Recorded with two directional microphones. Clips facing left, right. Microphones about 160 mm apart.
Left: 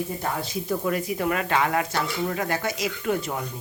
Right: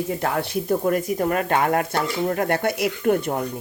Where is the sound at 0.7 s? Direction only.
45° right (ahead or behind).